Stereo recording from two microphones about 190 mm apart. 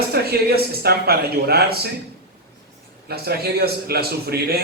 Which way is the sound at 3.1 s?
55° right (ahead or behind).